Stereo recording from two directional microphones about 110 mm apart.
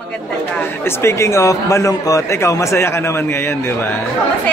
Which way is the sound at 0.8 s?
25° left (ahead or behind).